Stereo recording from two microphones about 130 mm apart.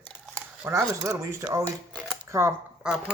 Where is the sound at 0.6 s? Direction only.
20° right (ahead or behind).